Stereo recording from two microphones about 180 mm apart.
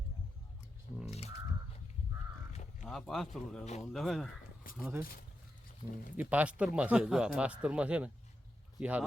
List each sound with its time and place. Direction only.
0.9 s crow: centre (ahead or behind)
2.8 s speech: centre (ahead or behind)
3.6 s speech: 40° left (ahead or behind)
3.9 s speech: centre (ahead or behind)
4.8 s speech: 10° right (ahead or behind)
6.1 s speech: 10° right (ahead or behind)